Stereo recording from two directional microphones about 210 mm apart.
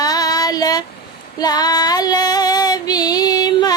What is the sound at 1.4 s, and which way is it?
Female singing, 20° left (ahead or behind).